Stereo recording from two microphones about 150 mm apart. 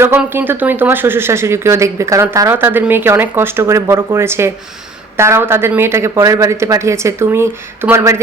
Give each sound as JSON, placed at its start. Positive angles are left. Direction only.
{"t": 0.2, "sound": "speech", "side_deg": -15}